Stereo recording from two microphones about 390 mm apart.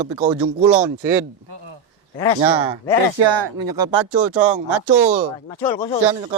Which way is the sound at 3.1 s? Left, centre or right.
Right.